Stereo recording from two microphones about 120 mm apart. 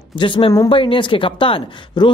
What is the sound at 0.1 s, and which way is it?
A man's voice, 40° left (ahead or behind).